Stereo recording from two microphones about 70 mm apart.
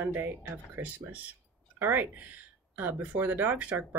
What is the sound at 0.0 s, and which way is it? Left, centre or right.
Speech, right.